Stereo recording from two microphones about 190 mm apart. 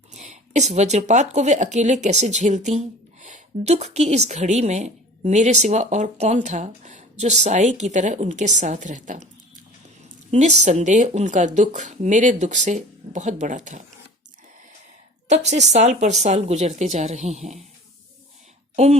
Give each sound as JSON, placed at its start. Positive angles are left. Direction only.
{"t": 0.1, "sound": "a woman's voice", "side_deg": -40}
{"t": 10.3, "sound": "a woman's voice", "side_deg": -35}
{"t": 15.4, "sound": "a woman's voice", "side_deg": -35}